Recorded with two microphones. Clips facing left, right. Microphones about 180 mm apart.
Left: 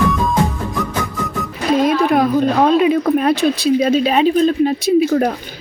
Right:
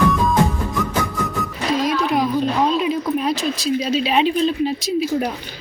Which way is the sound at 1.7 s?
55° left (ahead or behind).